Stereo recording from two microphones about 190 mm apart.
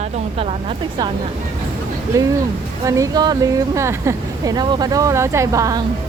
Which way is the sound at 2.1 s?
15° right (ahead or behind).